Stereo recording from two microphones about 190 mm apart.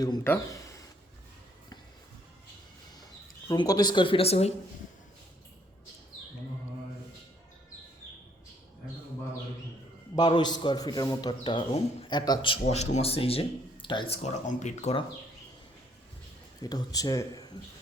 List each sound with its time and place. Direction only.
0.0 s a man's voice: 20° left (ahead or behind)
3.5 s a man's voice: 20° left (ahead or behind)
10.2 s a man's voice: 25° left (ahead or behind)
16.6 s a man's voice: 20° left (ahead or behind)